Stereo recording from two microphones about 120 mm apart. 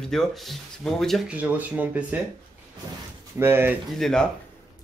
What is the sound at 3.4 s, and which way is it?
Speech, 20° right (ahead or behind).